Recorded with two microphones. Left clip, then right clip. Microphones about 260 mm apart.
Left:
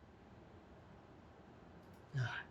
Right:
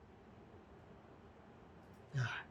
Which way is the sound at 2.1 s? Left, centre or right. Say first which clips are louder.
Right 1 dB; centre.